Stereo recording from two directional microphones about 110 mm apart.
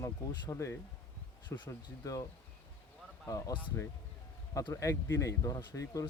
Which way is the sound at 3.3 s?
30° left (ahead or behind).